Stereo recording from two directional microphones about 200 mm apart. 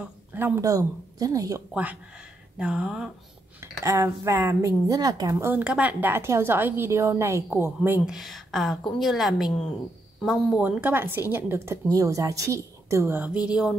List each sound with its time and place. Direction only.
0.3 s a woman's voice: 15° right (ahead or behind)
3.8 s a woman's voice: 15° right (ahead or behind)